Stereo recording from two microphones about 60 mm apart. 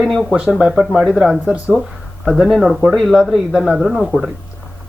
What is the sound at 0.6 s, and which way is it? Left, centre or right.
Speech, centre.